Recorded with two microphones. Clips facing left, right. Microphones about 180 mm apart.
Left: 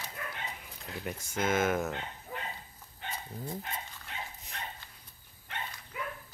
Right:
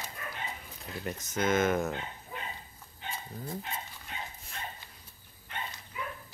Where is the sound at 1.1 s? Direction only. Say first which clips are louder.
Right 2 dB; 5° left (ahead or behind).